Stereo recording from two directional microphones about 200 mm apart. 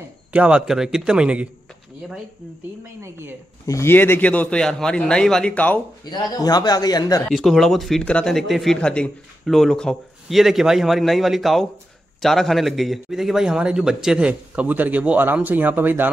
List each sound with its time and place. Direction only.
0.3 s speech: 5° right (ahead or behind)
3.0 s speech: 10° right (ahead or behind)
3.6 s a man's voice: 15° left (ahead or behind)
6.0 s a man's voice: 20° left (ahead or behind)
7.2 s speech: centre (ahead or behind)